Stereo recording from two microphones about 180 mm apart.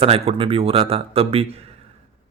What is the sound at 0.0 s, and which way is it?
Speech, 30° right (ahead or behind).